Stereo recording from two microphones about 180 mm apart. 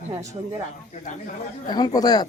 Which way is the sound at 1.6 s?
20° left (ahead or behind).